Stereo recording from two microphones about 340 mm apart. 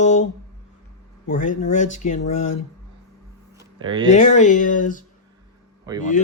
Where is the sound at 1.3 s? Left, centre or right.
Left.